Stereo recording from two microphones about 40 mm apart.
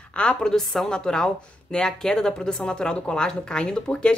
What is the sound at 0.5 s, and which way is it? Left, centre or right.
A woman's voice, centre.